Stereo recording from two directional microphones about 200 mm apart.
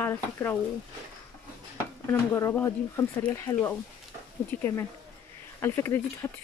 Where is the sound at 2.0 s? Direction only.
15° left (ahead or behind).